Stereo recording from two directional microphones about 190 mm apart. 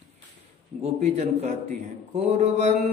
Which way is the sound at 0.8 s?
35° right (ahead or behind).